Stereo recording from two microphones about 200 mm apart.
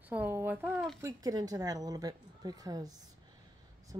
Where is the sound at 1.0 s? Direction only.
20° right (ahead or behind).